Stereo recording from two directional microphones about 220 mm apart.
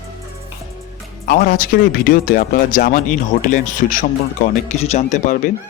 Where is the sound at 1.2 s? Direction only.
45° left (ahead or behind).